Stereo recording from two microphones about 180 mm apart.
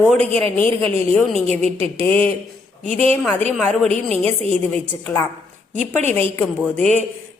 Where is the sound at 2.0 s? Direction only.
30° right (ahead or behind).